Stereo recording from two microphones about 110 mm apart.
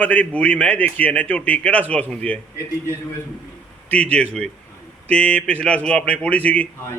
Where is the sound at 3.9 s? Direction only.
10° left (ahead or behind).